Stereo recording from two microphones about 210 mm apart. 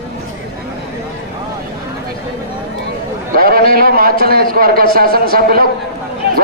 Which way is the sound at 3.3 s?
45° right (ahead or behind).